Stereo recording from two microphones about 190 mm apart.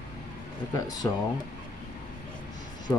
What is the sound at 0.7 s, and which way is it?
Speech, 20° left (ahead or behind).